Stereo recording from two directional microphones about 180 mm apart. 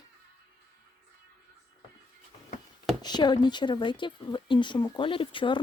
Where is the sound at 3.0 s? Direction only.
25° left (ahead or behind).